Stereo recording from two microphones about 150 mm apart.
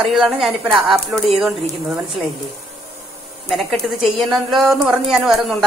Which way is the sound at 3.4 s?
Centre (ahead or behind).